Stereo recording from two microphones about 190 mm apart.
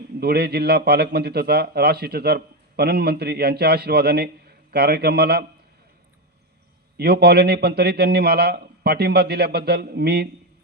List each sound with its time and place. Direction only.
0.2 s speech: 55° right (ahead or behind)
6.9 s speech: 55° right (ahead or behind)